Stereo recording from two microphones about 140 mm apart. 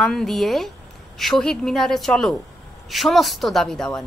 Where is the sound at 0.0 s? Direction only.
Centre (ahead or behind).